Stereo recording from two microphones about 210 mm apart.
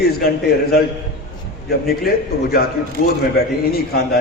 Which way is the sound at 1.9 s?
45° left (ahead or behind).